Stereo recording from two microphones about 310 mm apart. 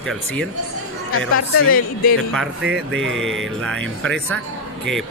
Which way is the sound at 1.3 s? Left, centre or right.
Left.